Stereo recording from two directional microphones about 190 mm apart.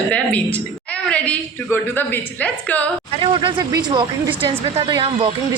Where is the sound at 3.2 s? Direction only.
25° right (ahead or behind).